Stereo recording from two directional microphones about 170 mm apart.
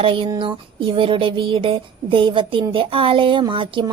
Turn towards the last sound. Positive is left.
turn(degrees=-30)  # may be behind; listen again after turning